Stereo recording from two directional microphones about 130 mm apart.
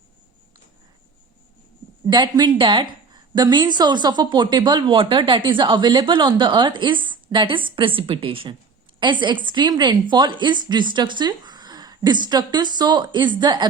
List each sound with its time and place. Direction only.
2.0 s a woman's voice: 35° right (ahead or behind)